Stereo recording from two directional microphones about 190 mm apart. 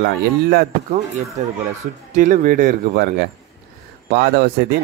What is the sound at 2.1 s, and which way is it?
Speech, 45° right (ahead or behind).